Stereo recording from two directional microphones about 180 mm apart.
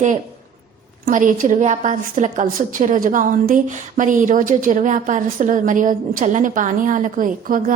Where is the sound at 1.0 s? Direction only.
45° right (ahead or behind).